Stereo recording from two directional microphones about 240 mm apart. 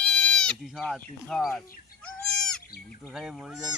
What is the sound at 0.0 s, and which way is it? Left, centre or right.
Speech, centre.